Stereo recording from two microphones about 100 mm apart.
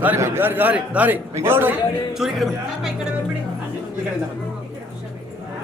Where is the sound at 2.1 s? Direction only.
5° right (ahead or behind).